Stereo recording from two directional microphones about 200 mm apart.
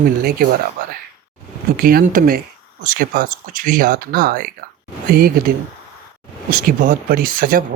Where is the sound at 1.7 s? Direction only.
45° right (ahead or behind).